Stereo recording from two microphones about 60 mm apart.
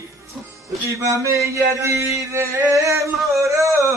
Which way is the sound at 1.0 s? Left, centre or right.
Right.